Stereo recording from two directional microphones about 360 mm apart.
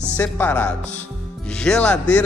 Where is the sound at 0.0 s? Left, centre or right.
Centre.